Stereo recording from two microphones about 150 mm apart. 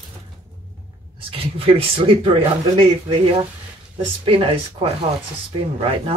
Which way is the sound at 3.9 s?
35° right (ahead or behind).